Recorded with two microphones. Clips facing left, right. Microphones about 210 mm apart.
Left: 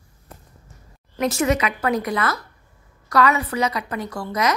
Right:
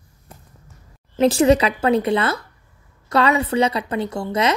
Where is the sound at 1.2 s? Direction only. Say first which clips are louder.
Right 6 dB; 30° right (ahead or behind).